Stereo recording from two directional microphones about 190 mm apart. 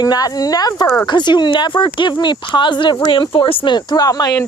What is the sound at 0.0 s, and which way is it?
Speech, 20° left (ahead or behind).